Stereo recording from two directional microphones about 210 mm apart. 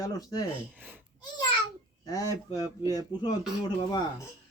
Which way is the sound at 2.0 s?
15° left (ahead or behind).